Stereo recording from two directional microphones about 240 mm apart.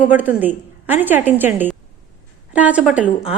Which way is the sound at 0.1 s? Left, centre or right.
Centre.